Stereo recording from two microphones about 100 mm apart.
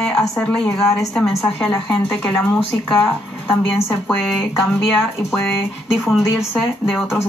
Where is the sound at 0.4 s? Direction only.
5° left (ahead or behind).